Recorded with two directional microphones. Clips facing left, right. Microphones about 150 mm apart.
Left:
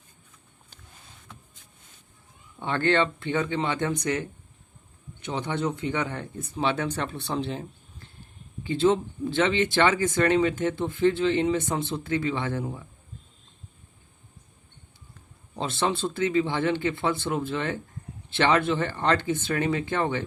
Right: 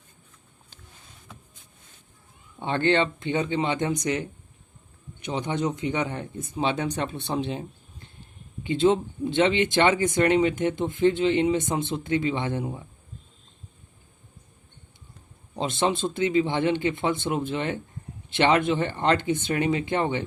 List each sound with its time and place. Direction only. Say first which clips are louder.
2.6 s speech: right 1 dB; 20° right (ahead or behind)
15.5 s speech: right 2 dB; 20° right (ahead or behind)